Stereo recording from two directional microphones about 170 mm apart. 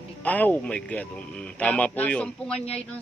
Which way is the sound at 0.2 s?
10° left (ahead or behind).